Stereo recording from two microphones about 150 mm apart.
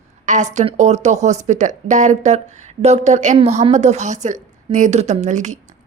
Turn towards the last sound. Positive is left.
turn(degrees=-55)  # may be behind; listen again after turning